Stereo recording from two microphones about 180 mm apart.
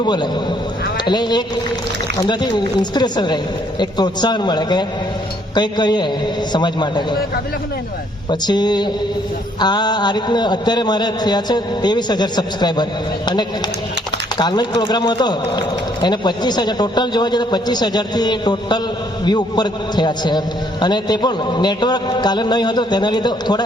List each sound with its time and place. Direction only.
0.0 s speech: 25° left (ahead or behind)
8.3 s speech: 25° left (ahead or behind)